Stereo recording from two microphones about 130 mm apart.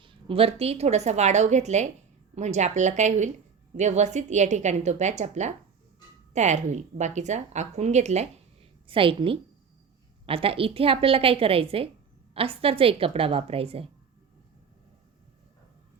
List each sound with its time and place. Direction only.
0.0 s a woman's voice: 40° right (ahead or behind); by 8.3 s 60° right (ahead or behind)
8.9 s a woman's voice: 45° right (ahead or behind)